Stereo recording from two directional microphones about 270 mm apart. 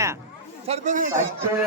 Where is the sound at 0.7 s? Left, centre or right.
Right.